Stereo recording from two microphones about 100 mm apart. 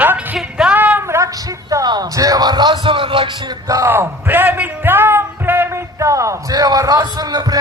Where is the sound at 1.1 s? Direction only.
30° right (ahead or behind); by 3.3 s 55° right (ahead or behind).